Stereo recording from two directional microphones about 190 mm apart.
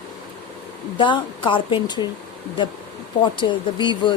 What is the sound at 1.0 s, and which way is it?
Speech, 25° left (ahead or behind).